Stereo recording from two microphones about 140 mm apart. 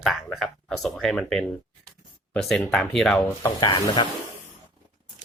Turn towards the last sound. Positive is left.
turn(degrees=35)  # may be behind; listen again after turning